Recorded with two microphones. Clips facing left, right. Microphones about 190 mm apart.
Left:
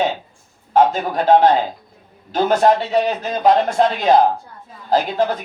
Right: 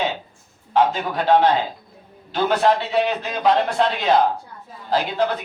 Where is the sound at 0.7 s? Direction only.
45° left (ahead or behind).